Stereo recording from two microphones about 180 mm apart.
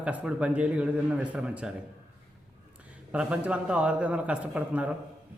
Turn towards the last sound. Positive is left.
turn(degrees=-5)  # may be behind; listen again after turning